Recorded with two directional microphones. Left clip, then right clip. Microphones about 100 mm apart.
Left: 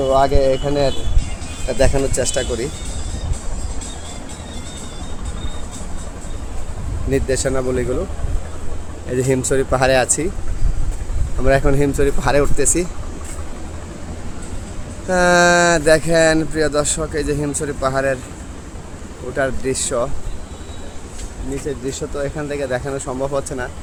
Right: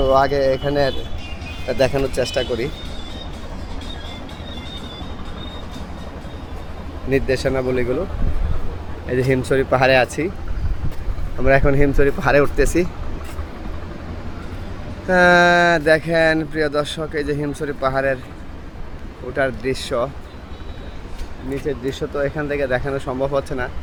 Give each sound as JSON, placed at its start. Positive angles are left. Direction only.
{"t": 0.0, "sound": "speech", "side_deg": 15}
{"t": 7.1, "sound": "speech", "side_deg": 25}
{"t": 9.0, "sound": "speech", "side_deg": 20}
{"t": 11.3, "sound": "speech", "side_deg": 5}
{"t": 15.0, "sound": "speech", "side_deg": -5}
{"t": 19.4, "sound": "speech", "side_deg": -10}
{"t": 21.7, "sound": "speech", "side_deg": -15}